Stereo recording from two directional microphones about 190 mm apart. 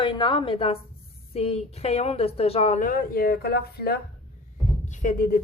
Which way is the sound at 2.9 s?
50° left (ahead or behind).